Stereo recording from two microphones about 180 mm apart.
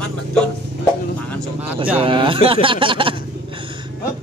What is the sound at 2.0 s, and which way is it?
Speech, 30° right (ahead or behind).